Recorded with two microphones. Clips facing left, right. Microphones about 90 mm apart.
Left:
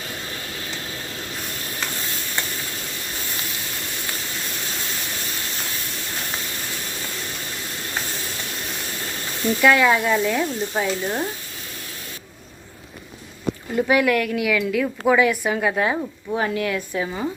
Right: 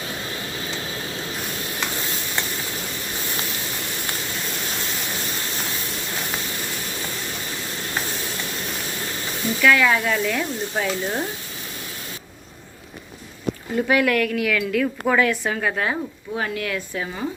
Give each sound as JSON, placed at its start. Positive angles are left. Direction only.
{"t": 9.6, "sound": "a woman's voice", "side_deg": 20}
{"t": 10.8, "sound": "frying", "side_deg": 0}
{"t": 13.7, "sound": "a woman's voice", "side_deg": 5}